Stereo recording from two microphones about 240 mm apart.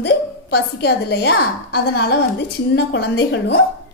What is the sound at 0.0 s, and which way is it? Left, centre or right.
A woman's voice, left.